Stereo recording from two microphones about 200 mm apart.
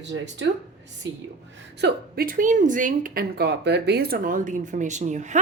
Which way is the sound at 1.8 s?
55° right (ahead or behind).